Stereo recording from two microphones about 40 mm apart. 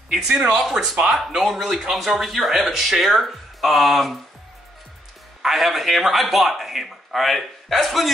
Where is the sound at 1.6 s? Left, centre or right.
Centre.